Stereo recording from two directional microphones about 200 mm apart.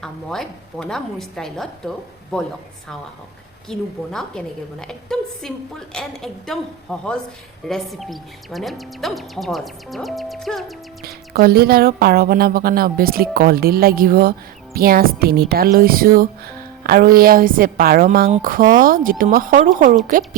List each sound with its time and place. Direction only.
0.0 s speech: centre (ahead or behind)
3.7 s speech: 5° left (ahead or behind)
11.0 s speech: 50° right (ahead or behind)